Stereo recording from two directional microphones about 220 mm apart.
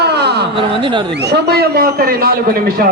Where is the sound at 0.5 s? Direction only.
20° right (ahead or behind).